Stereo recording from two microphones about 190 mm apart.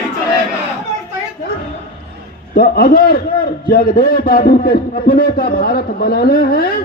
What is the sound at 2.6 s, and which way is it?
A man's voice, 50° left (ahead or behind).